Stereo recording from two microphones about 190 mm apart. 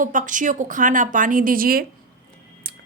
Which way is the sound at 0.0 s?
45° right (ahead or behind).